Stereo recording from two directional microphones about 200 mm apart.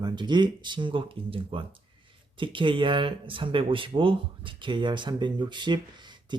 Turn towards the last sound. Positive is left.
turn(degrees=-20)  # may be behind; listen again after turning